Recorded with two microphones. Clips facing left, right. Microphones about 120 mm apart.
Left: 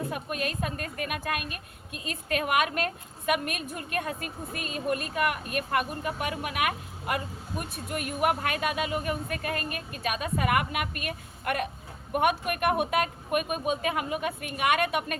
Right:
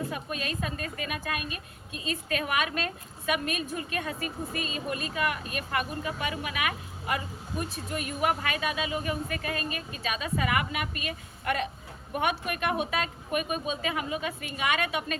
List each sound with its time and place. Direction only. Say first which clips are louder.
0.1 s a woman's voice: left 2 dB; 55° left (ahead or behind)